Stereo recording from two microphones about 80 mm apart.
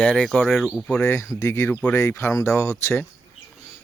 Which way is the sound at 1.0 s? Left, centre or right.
Left.